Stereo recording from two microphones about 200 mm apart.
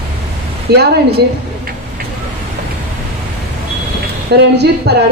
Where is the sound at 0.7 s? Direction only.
55° right (ahead or behind).